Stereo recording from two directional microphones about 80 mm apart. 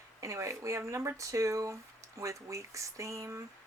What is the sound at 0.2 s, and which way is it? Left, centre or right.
Speech, right.